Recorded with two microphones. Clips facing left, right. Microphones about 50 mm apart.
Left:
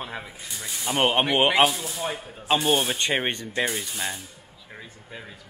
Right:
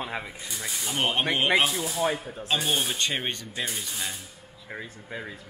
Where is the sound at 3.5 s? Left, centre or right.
Centre.